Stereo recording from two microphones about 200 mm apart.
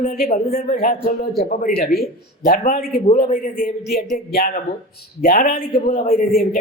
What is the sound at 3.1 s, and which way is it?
Speech, 30° left (ahead or behind).